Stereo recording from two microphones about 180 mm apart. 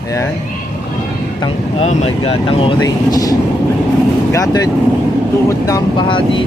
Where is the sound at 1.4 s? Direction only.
35° left (ahead or behind).